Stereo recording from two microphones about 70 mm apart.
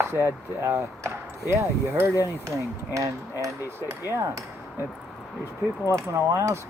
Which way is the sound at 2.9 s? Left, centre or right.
Right.